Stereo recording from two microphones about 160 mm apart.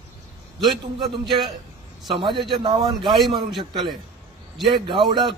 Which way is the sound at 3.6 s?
30° right (ahead or behind).